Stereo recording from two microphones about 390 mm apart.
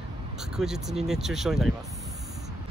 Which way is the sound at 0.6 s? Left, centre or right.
Centre.